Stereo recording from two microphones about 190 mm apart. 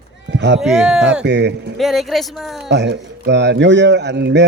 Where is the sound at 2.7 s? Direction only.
65° right (ahead or behind).